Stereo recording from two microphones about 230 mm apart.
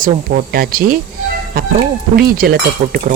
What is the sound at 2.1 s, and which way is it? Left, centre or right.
Speech, right.